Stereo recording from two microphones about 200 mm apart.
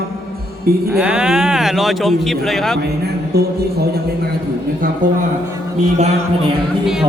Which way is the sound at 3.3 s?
55° right (ahead or behind).